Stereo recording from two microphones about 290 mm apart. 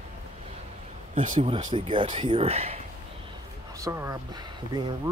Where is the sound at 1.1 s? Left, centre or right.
Right.